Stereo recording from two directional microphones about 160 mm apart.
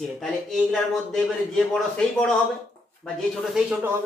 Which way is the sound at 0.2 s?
Centre (ahead or behind).